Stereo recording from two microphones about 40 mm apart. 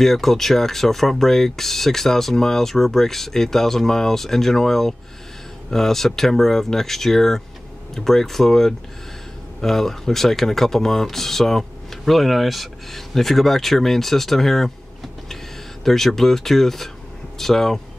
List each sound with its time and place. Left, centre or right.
0.0 s speech: centre
15.8 s speech: centre